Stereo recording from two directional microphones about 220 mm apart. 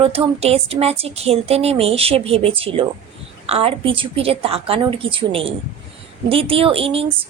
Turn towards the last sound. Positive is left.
turn(degrees=-25)  # may be behind; listen again after turning